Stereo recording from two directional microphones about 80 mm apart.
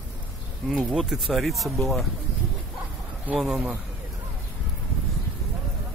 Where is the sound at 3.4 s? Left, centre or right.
Centre.